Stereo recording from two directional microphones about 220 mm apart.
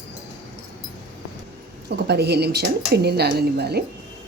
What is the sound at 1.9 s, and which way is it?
Speech, 50° right (ahead or behind).